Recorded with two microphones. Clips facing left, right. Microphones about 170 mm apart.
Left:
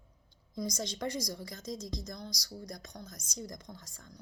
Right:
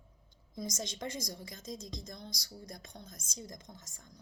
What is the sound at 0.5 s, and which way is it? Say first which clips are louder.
A woman's voice: left 3 dB; 20° right (ahead or behind).